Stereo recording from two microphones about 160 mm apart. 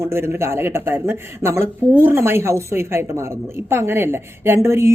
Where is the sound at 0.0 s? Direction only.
15° right (ahead or behind).